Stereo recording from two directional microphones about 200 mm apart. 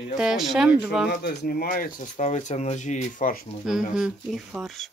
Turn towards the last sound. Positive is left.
turn(degrees=0)  # may be behind; listen again after turning